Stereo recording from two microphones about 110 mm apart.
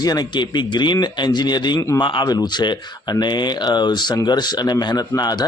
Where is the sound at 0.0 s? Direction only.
40° left (ahead or behind).